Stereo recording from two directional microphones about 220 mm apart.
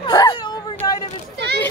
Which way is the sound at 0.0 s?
20° left (ahead or behind).